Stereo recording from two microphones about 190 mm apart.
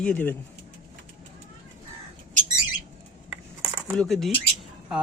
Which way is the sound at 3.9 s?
5° left (ahead or behind).